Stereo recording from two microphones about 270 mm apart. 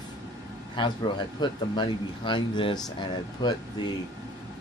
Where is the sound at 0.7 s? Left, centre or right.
Centre.